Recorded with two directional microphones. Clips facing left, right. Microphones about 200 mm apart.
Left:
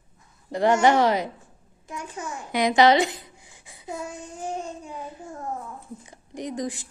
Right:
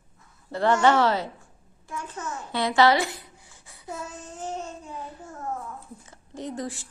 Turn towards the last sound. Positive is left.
turn(degrees=15)  # may be behind; listen again after turning